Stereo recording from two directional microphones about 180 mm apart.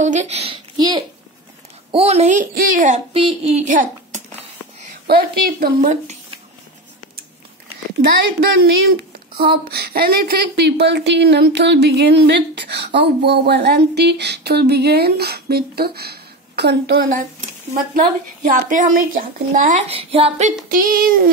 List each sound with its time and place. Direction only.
0.0 s speech: 40° right (ahead or behind)
3.1 s a child's voice: 30° right (ahead or behind)
5.0 s speech: 60° right (ahead or behind); by 6.1 s 45° right (ahead or behind)
8.5 s speech: 60° right (ahead or behind)
18.7 s speech: 45° right (ahead or behind)
19.9 s speech: 30° right (ahead or behind)
20.7 s speech: 55° right (ahead or behind)